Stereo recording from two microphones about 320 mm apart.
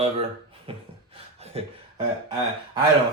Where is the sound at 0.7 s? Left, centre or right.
Centre.